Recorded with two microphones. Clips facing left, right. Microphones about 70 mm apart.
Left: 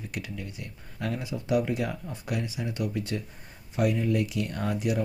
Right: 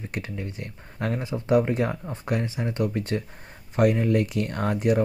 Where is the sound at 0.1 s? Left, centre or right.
Right.